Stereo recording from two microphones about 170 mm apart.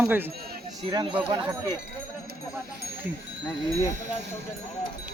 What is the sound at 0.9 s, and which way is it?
Speech, 25° right (ahead or behind).